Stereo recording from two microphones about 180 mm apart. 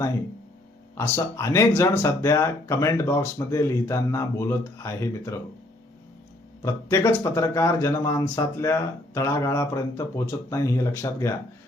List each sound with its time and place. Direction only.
0.9 s speech: 15° left (ahead or behind)
6.6 s speech: 15° left (ahead or behind)